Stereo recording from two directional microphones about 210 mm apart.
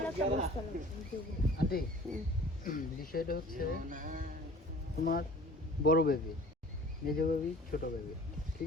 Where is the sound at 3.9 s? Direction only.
40° right (ahead or behind).